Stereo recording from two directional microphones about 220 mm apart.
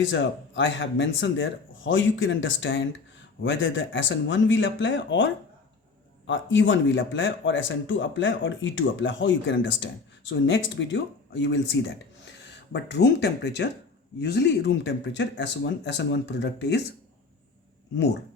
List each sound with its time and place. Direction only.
0.0 s speech: 55° left (ahead or behind)